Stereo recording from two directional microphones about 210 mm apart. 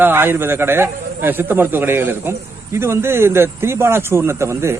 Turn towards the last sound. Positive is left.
turn(degrees=-10)  # may be behind; listen again after turning